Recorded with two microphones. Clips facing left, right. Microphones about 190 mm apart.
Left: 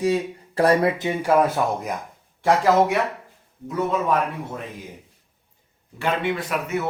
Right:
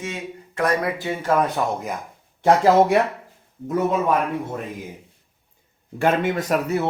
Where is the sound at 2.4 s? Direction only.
20° right (ahead or behind).